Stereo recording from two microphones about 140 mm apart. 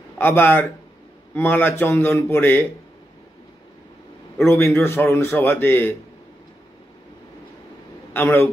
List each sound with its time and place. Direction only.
0.2 s a man's voice: 15° left (ahead or behind)
4.5 s a man's voice: 15° left (ahead or behind)
8.1 s a man's voice: 15° left (ahead or behind)